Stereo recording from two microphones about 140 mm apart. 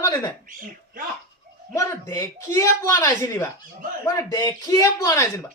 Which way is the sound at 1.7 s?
20° left (ahead or behind).